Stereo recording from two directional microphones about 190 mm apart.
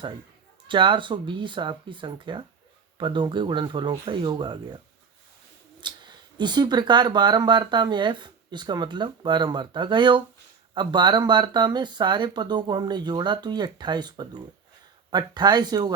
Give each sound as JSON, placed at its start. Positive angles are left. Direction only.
{"t": 0.7, "sound": "speech", "side_deg": -25}
{"t": 5.8, "sound": "speech", "side_deg": -25}